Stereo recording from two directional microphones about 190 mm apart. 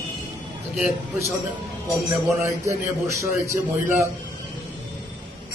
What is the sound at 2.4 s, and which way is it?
A man's voice, 15° right (ahead or behind).